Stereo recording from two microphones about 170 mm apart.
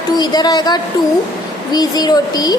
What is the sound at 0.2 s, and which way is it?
A woman's voice, 25° left (ahead or behind).